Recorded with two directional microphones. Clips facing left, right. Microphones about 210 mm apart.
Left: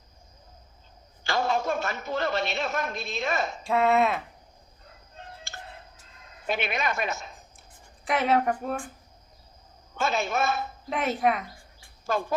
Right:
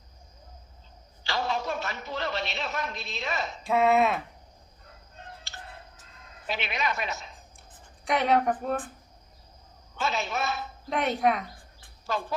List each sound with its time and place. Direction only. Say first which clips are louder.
1.2 s a man's voice: left 4 dB; 50° left (ahead or behind)
3.6 s a woman's voice: right 1 dB; centre (ahead or behind)
5.5 s music: left 2 dB; 50° left (ahead or behind)
6.5 s speech: left 3 dB; 50° left (ahead or behind)
8.0 s a woman's voice: even; centre (ahead or behind)
9.9 s speech: left 3 dB; 50° left (ahead or behind)
10.8 s a woman's voice: even; centre (ahead or behind)
12.1 s speech: left 3 dB; 50° left (ahead or behind)